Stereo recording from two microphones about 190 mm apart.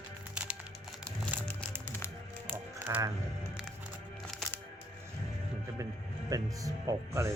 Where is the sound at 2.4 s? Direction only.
10° right (ahead or behind).